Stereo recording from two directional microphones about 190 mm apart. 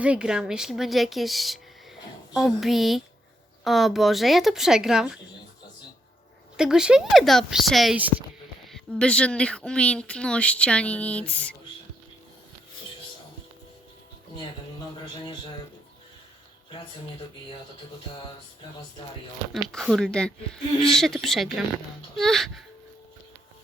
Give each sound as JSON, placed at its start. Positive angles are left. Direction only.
{"t": 0.0, "sound": "speech", "side_deg": -5}
{"t": 6.6, "sound": "speech", "side_deg": -5}
{"t": 15.0, "sound": "a man's voice", "side_deg": 25}
{"t": 19.6, "sound": "speech", "side_deg": 0}